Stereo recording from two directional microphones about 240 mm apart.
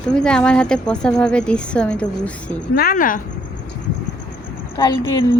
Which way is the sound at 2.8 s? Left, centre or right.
Left.